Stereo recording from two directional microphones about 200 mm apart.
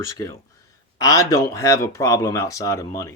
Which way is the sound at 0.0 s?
15° left (ahead or behind).